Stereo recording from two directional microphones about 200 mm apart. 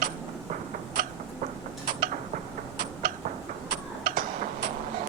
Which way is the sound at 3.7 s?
45° right (ahead or behind).